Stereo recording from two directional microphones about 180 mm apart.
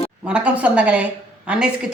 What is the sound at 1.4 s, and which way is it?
Speech, 5° right (ahead or behind).